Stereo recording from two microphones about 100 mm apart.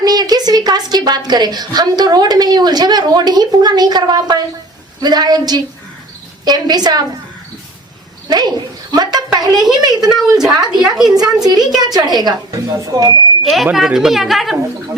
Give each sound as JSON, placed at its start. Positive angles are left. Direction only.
{"t": 0.0, "sound": "a woman's voice", "side_deg": -40}
{"t": 8.3, "sound": "a woman's voice", "side_deg": -45}
{"t": 10.1, "sound": "a woman's voice", "side_deg": -5}
{"t": 11.3, "sound": "a woman's voice", "side_deg": -40}
{"t": 13.4, "sound": "a woman's voice", "side_deg": 0}